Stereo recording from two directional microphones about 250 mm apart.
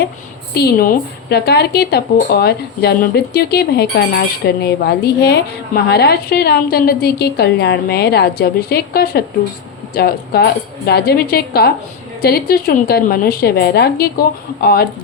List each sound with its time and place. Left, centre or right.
0.5 s speech: left